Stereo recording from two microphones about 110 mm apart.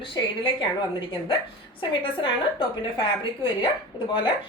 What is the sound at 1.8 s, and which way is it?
A woman's voice, 50° left (ahead or behind).